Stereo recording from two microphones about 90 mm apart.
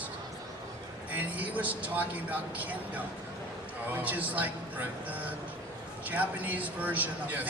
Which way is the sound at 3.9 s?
20° right (ahead or behind).